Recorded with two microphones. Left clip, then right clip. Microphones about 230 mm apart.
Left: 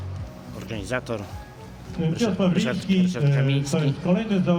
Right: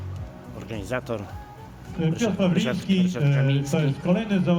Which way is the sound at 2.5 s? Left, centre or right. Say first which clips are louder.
Even; centre.